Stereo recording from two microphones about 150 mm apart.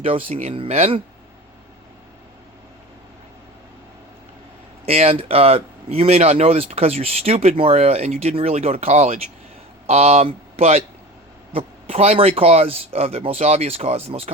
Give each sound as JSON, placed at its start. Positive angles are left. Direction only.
{"t": 0.0, "sound": "speech", "side_deg": -40}
{"t": 4.9, "sound": "speech", "side_deg": -45}